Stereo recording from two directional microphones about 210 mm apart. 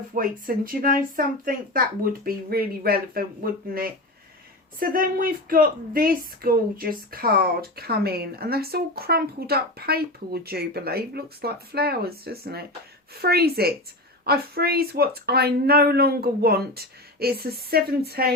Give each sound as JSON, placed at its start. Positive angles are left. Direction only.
{"t": 0.1, "sound": "a woman's voice", "side_deg": -40}